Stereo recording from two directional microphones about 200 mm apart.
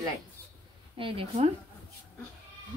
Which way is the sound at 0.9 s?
25° right (ahead or behind).